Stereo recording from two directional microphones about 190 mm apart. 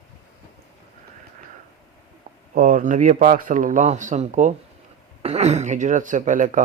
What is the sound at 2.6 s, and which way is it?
Speech, 45° right (ahead or behind).